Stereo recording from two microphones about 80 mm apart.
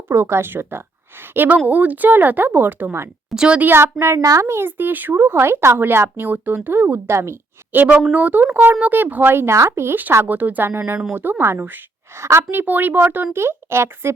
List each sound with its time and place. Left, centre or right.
0.1 s speech: right
3.2 s a woman's voice: centre
3.7 s speech: right
3.9 s speech: right
7.1 s speech: right
7.7 s speech: right